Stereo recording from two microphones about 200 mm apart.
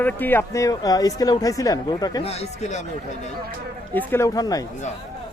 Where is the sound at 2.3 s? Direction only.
30° left (ahead or behind).